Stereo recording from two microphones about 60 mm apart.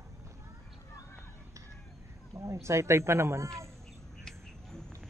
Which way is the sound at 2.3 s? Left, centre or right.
Right.